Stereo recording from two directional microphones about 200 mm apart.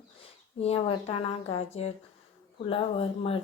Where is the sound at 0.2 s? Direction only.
30° left (ahead or behind).